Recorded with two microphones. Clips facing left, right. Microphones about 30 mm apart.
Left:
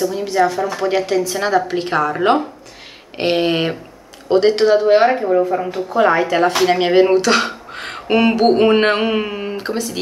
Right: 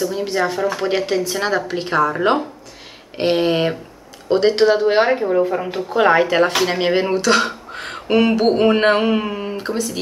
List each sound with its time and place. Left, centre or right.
0.0 s speech: centre
1.7 s speech: centre
5.9 s speech: right
6.6 s speech: centre